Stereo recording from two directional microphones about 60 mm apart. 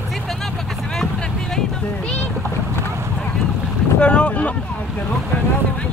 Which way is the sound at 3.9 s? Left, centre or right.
Centre.